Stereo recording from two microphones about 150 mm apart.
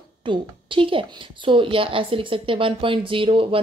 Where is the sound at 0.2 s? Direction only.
35° right (ahead or behind).